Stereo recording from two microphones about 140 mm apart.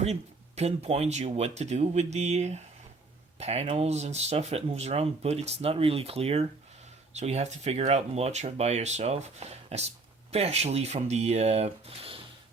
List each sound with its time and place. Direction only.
0.0 s speech: 50° right (ahead or behind)